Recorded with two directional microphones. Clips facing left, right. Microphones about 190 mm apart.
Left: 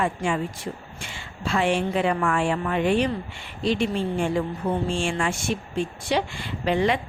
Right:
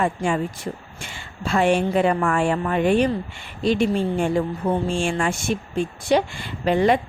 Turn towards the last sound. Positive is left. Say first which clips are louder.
# right 4 dB
turn(degrees=-45)  # may be behind; listen again after turning